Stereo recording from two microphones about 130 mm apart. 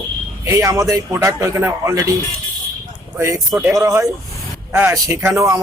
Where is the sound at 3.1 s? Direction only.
20° right (ahead or behind).